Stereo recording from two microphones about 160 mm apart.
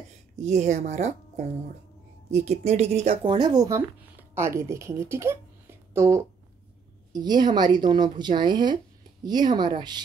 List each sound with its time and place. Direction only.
0.4 s speech: 45° right (ahead or behind)
3.3 s speech: 25° right (ahead or behind)